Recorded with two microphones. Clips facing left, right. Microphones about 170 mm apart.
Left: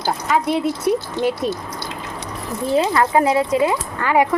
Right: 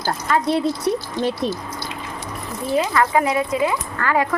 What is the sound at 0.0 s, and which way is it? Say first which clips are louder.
Speech: left 1 dB; 5° left (ahead or behind).